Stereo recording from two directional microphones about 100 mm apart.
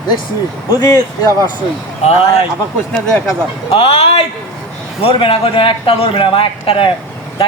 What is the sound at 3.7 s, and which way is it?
Speech, 75° left (ahead or behind).